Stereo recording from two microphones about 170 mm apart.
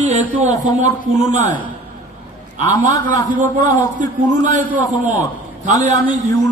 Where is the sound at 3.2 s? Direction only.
50° right (ahead or behind).